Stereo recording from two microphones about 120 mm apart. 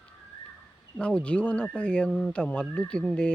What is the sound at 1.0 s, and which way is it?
Speech, 10° left (ahead or behind).